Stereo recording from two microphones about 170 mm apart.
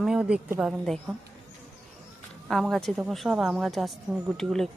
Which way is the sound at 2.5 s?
Centre (ahead or behind).